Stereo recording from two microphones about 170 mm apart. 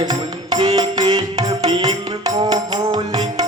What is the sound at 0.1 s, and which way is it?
Music, 25° right (ahead or behind).